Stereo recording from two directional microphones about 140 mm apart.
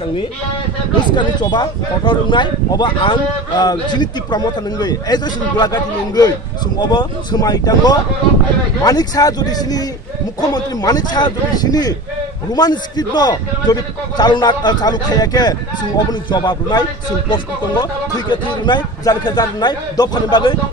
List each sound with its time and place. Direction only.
1.1 s a man's voice: 30° left (ahead or behind)